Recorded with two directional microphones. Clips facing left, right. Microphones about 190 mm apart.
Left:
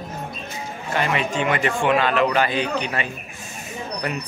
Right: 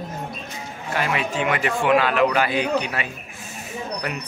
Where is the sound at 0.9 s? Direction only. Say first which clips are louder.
Left 1 dB; 5° right (ahead or behind).